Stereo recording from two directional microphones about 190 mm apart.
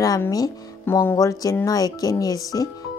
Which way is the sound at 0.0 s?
20° left (ahead or behind).